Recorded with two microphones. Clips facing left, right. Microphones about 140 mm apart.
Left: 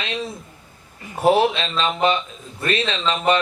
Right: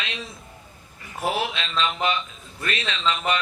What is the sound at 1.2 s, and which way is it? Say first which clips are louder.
A man's voice: left 9 dB; 30° left (ahead or behind).